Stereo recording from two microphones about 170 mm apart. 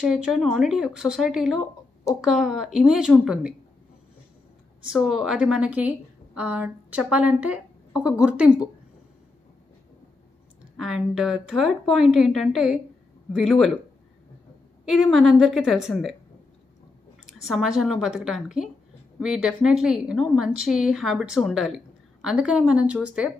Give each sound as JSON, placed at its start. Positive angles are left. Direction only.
{"t": 0.0, "sound": "a woman's voice", "side_deg": -5}
{"t": 4.8, "sound": "a woman's voice", "side_deg": 0}
{"t": 10.8, "sound": "a woman's voice", "side_deg": -5}
{"t": 14.9, "sound": "a woman's voice", "side_deg": 0}
{"t": 17.3, "sound": "a woman's voice", "side_deg": 0}